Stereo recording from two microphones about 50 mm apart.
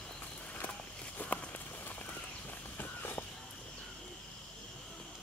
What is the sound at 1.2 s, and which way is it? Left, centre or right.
Walk, left.